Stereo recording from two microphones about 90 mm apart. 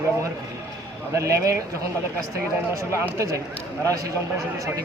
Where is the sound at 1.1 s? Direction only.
35° right (ahead or behind).